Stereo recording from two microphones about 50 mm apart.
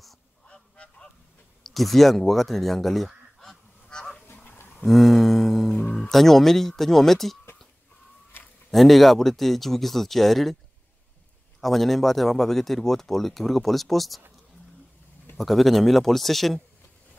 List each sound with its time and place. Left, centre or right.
0.5 s goose: left
1.6 s speech: centre
3.3 s goose: centre
4.5 s a sound: left
4.8 s a sound: centre
5.9 s speech: centre
8.6 s speech: centre
11.6 s speech: centre
15.3 s speech: centre